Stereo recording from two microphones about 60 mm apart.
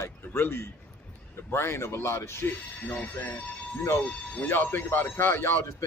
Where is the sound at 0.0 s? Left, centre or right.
Left.